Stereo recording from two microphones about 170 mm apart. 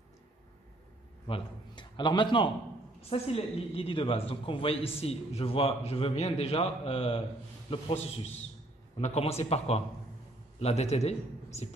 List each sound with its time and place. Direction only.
1.2 s a man's voice: 30° left (ahead or behind)